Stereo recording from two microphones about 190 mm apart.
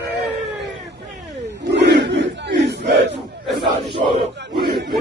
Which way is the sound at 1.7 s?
65° right (ahead or behind).